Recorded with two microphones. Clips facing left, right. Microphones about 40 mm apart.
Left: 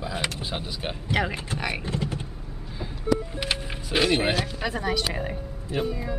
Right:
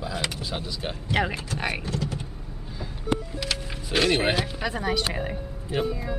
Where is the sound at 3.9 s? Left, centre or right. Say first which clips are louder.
Even; centre.